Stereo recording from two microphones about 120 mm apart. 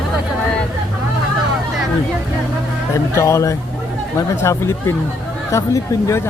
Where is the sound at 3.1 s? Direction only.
25° left (ahead or behind).